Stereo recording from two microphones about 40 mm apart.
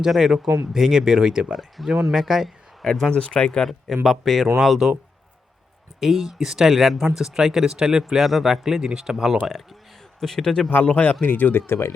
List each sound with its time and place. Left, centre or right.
0.0 s speech: centre
1.5 s speech: centre
2.8 s speech: centre
3.1 s speech: left
3.9 s speech: centre
4.8 s speech: centre
6.0 s speech: centre
7.3 s speech: centre
8.1 s speech: centre
8.8 s speech: centre
10.2 s speech: centre
11.0 s speech: left
11.3 s speech: left
11.5 s speech: left